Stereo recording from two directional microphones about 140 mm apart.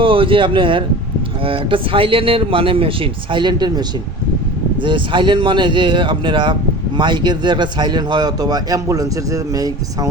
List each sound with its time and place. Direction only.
0.0 s speech: 40° right (ahead or behind)